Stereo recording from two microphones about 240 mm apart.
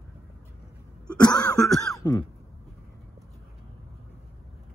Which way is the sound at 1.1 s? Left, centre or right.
Centre.